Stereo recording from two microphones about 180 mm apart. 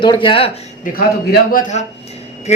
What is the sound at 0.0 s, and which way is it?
Speech, 25° left (ahead or behind).